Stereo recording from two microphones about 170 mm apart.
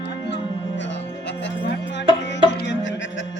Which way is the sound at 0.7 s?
90° left.